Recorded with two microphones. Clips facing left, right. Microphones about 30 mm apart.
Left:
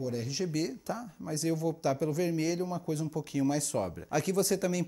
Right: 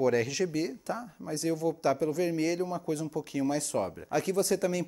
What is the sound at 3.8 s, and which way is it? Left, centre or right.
Speech, right.